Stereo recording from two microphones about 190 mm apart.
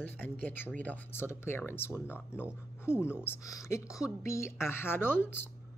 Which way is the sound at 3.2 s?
15° left (ahead or behind).